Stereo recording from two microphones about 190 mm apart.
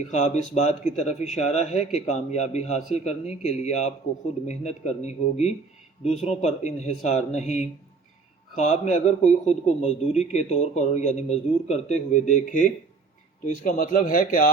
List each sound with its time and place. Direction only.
0.1 s a man's voice: 35° left (ahead or behind)